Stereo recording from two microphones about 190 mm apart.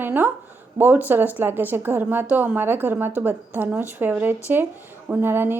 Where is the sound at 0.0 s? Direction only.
10° right (ahead or behind).